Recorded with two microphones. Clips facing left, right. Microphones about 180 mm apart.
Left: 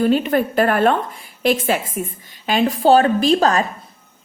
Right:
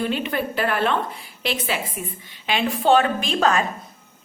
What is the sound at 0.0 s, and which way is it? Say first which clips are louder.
A woman's voice: left 8 dB; 45° left (ahead or behind).